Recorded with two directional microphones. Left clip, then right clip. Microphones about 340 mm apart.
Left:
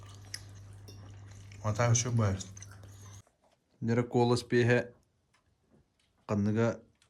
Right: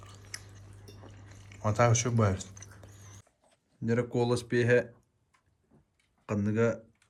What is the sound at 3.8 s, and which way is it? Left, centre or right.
Speech, centre.